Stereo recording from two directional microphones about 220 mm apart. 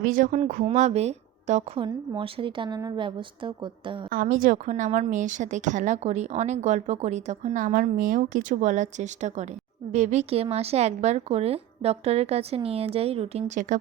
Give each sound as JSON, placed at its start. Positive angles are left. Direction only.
{"t": 0.0, "sound": "a woman's voice", "side_deg": -35}
{"t": 4.1, "sound": "a woman's voice", "side_deg": -40}